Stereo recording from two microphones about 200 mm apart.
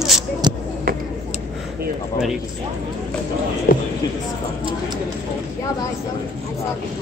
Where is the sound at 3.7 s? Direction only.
45° left (ahead or behind).